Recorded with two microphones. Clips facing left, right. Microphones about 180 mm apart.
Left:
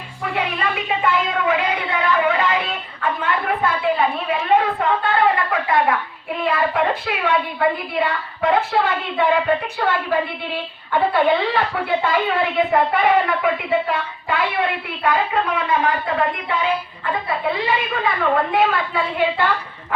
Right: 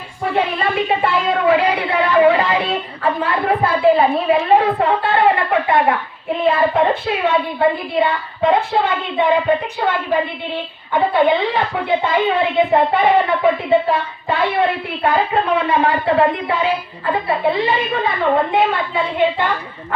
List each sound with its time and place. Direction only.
0.3 s speech: 30° right (ahead or behind)